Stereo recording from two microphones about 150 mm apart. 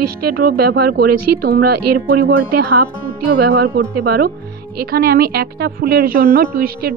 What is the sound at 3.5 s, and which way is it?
A woman's voice, 90° right.